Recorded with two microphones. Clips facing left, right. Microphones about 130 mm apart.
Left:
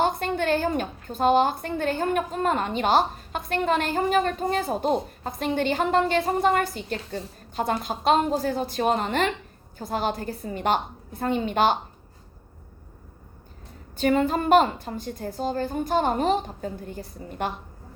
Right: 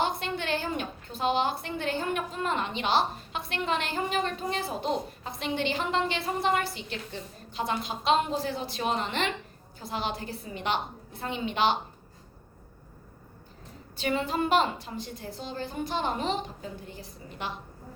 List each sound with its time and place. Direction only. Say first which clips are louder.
0.0 s a woman's voice: left 6 dB; 45° left (ahead or behind)
13.9 s a woman's voice: left 7 dB; 45° left (ahead or behind)